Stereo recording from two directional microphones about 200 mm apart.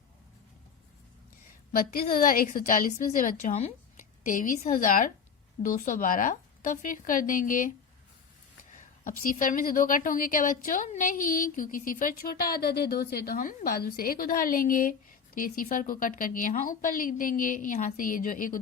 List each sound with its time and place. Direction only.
1.7 s a woman's voice: 45° left (ahead or behind)
8.7 s a woman's voice: 40° left (ahead or behind)